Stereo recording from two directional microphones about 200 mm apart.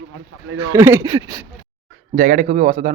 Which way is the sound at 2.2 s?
40° right (ahead or behind).